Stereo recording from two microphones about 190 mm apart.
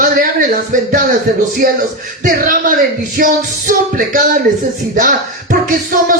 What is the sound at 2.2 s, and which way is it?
Speech, 45° right (ahead or behind).